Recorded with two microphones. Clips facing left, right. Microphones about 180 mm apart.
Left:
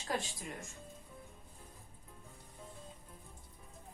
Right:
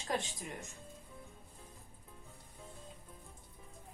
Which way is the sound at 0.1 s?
20° right (ahead or behind).